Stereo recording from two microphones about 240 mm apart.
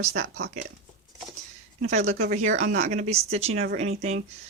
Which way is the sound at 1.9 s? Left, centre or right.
Right.